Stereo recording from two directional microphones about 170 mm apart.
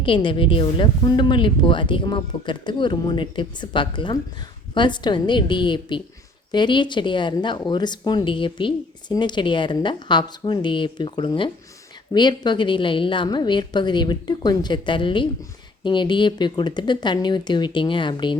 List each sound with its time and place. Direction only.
0.0 s a woman's voice: 30° left (ahead or behind)